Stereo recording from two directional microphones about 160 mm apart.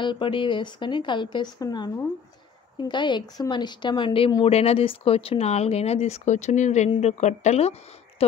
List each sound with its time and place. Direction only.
0.0 s speech: 30° left (ahead or behind)